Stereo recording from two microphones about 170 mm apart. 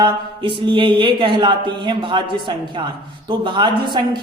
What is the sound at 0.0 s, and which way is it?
A woman's voice, 30° right (ahead or behind).